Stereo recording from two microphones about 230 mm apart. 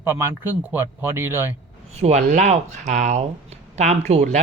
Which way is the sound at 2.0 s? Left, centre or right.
Right.